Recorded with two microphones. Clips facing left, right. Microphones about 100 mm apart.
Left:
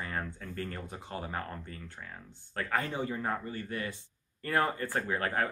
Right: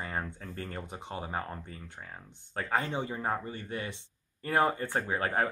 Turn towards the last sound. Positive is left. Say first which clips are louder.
# right 1 dB
turn(degrees=-20)  # may be behind; listen again after turning